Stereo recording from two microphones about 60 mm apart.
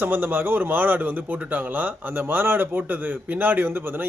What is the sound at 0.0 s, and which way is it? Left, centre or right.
A man's voice, right.